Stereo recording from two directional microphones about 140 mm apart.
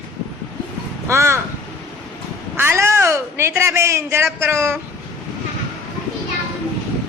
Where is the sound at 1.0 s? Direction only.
20° right (ahead or behind).